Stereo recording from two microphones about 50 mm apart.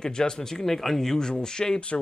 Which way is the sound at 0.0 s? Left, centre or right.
Centre.